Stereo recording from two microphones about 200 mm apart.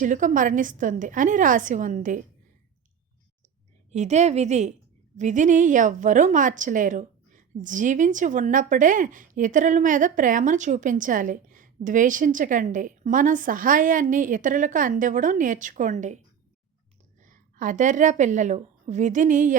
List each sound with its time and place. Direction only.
0.0 s a woman's voice: 40° right (ahead or behind)
3.9 s a woman's voice: 35° right (ahead or behind)